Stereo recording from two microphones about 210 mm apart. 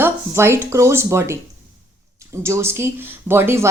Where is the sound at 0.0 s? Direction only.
10° right (ahead or behind).